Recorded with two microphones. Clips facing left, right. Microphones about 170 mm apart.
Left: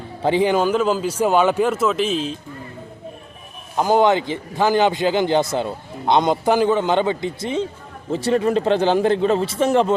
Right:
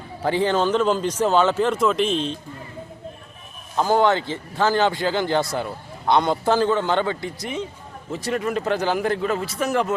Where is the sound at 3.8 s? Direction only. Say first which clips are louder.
Left 3 dB; 15° left (ahead or behind).